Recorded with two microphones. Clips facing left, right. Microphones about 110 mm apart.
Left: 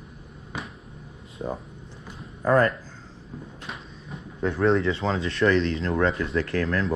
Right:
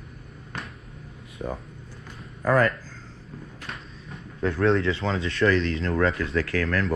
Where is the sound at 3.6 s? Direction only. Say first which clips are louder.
Left 1 dB; centre (ahead or behind).